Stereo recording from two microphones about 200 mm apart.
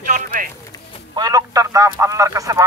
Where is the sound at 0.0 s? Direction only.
45° right (ahead or behind).